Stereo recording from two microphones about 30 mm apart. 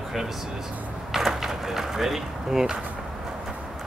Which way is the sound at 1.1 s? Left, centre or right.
Centre.